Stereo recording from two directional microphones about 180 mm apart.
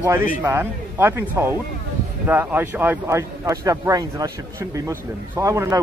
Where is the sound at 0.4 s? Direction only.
15° right (ahead or behind).